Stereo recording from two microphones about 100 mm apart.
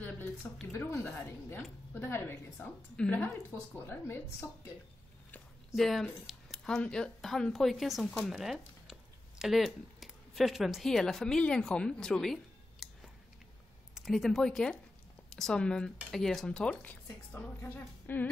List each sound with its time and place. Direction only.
0.7 s a woman's voice: 25° left (ahead or behind)
5.8 s speech: centre (ahead or behind)
12.8 s a sound: centre (ahead or behind)
13.9 s speech: centre (ahead or behind); by 18.3 s 20° left (ahead or behind)